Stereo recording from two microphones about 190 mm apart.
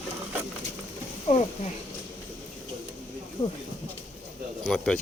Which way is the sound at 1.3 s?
35° left (ahead or behind).